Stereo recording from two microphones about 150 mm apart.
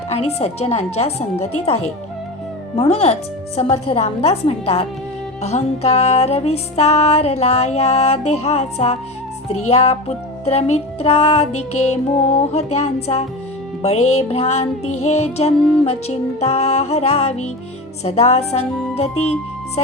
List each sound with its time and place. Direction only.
0.1 s music: 45° left (ahead or behind)